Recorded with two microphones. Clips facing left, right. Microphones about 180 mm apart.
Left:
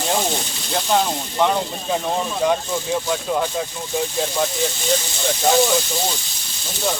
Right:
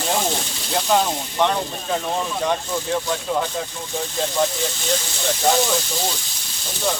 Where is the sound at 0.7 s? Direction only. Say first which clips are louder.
Even; centre (ahead or behind).